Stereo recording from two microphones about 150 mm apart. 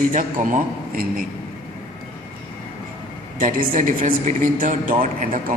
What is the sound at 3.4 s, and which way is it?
A man's voice, 65° right (ahead or behind).